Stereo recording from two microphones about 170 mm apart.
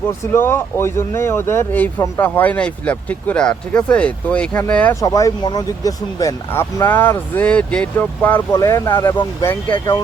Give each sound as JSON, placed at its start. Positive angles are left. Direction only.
{"t": 0.3, "sound": "speech", "side_deg": 15}